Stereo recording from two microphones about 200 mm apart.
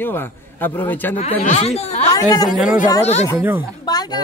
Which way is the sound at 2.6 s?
5° right (ahead or behind).